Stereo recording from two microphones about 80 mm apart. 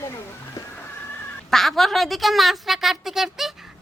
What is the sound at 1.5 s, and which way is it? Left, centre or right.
A woman's voice, centre.